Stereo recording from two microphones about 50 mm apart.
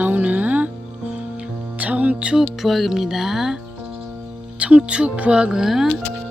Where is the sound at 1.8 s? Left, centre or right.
Right.